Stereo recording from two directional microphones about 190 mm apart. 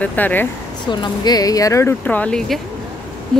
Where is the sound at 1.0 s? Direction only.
20° left (ahead or behind).